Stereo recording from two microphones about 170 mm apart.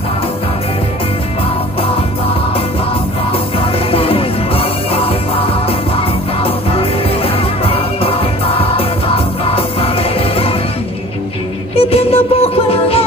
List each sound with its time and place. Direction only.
3.5 s music: 35° left (ahead or behind)
11.7 s music: 35° left (ahead or behind)